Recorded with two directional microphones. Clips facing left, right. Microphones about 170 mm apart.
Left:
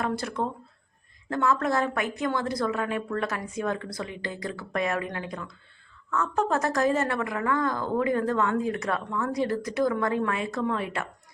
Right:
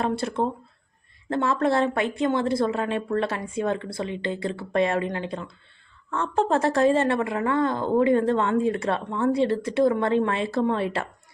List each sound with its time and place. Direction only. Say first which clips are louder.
0.0 s a woman's voice: right 4 dB; 25° right (ahead or behind)